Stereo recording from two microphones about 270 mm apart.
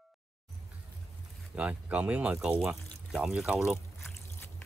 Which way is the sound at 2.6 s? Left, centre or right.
Centre.